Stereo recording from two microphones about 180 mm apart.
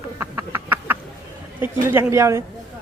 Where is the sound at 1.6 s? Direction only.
10° right (ahead or behind).